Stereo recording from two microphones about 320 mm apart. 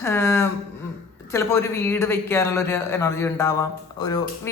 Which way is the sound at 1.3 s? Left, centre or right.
Centre.